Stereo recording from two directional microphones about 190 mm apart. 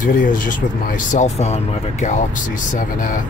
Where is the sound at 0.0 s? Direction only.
45° left (ahead or behind).